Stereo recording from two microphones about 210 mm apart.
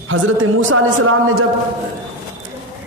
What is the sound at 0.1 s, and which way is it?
A man's voice, 65° right (ahead or behind).